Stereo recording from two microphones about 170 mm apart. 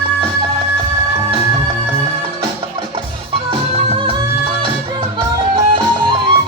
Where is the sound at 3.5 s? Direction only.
30° right (ahead or behind).